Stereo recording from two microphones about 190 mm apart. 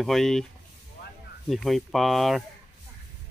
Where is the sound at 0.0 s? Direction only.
Centre (ahead or behind).